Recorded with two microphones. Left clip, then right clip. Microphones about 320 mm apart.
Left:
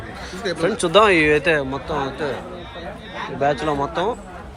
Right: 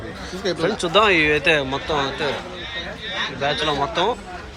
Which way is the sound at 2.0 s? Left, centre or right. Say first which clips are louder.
Right 1 dB; centre.